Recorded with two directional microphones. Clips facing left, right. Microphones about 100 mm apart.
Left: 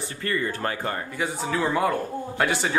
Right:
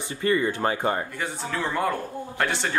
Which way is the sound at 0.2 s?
15° right (ahead or behind).